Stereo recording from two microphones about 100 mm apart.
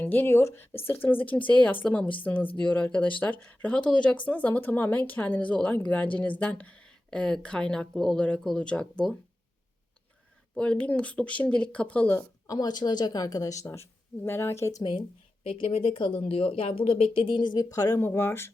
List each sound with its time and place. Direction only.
0.0 s speech: 20° left (ahead or behind)
10.6 s speech: 10° left (ahead or behind)
12.5 s a woman's voice: 40° left (ahead or behind)
15.4 s speech: 70° left (ahead or behind); by 18.1 s 35° left (ahead or behind)
18.1 s speech: 25° left (ahead or behind)